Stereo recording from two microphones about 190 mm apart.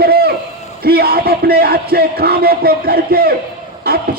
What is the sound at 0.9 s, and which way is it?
Music, 55° right (ahead or behind).